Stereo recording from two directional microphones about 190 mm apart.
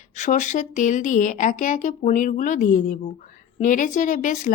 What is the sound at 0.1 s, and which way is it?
A woman's voice, 40° left (ahead or behind).